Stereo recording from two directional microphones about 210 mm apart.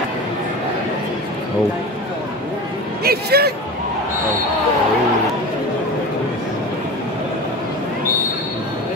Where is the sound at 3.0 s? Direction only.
50° right (ahead or behind).